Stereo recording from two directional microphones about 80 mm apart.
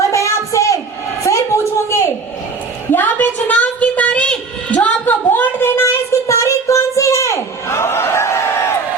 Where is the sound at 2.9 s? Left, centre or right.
Left.